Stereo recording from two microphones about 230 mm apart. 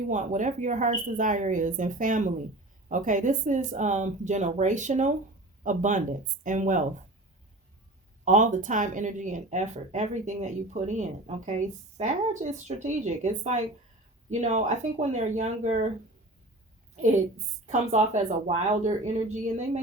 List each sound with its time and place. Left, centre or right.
0.1 s speech: right
8.2 s speech: right
17.7 s speech: right